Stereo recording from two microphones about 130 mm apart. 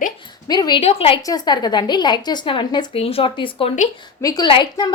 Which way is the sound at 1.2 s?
30° left (ahead or behind).